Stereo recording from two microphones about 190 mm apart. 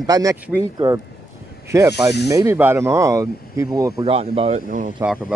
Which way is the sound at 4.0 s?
30° right (ahead or behind).